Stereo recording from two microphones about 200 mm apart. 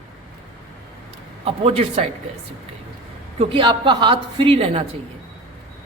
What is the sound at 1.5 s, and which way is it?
Speech, 30° right (ahead or behind).